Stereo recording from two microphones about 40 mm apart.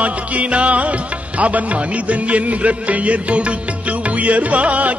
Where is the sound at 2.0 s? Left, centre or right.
Right.